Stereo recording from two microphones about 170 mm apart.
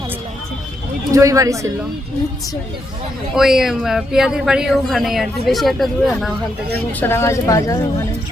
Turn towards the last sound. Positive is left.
turn(degrees=20)  # may be behind; listen again after turning